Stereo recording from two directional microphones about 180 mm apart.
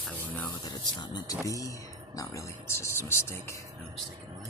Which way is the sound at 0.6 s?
25° left (ahead or behind).